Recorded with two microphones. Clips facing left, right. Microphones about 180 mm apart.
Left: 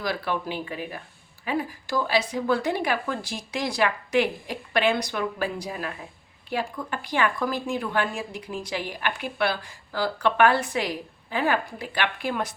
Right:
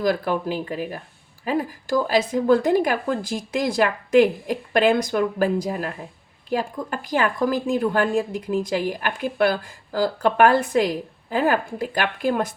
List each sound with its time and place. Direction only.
0.0 s speech: 45° right (ahead or behind)